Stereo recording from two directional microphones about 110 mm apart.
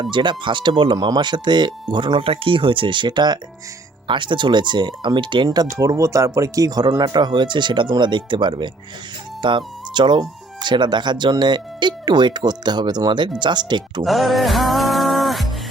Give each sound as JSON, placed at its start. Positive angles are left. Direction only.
{"t": 0.0, "sound": "speech", "side_deg": -45}
{"t": 14.0, "sound": "music", "side_deg": 0}